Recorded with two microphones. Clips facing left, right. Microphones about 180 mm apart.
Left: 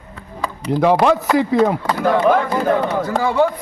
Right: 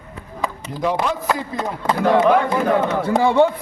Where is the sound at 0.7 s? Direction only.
75° left (ahead or behind).